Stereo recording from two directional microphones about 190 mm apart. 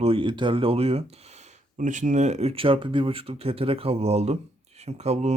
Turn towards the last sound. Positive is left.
turn(degrees=-35)  # may be behind; listen again after turning